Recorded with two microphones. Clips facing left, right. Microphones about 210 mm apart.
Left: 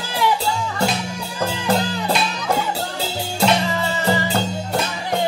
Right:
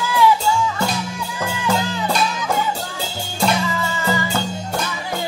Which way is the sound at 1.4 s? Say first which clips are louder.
Left 2 dB; 35° left (ahead or behind).